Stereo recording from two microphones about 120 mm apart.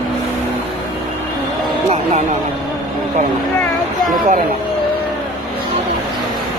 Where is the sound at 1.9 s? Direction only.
65° right (ahead or behind).